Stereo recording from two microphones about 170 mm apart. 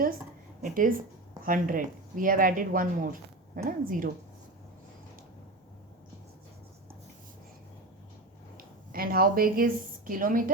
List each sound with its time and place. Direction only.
0.6 s speech: 55° right (ahead or behind)
8.5 s a sound: 60° right (ahead or behind)
10.1 s speech: 55° right (ahead or behind)